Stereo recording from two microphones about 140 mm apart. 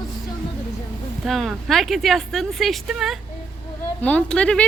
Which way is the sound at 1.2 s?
Centre (ahead or behind).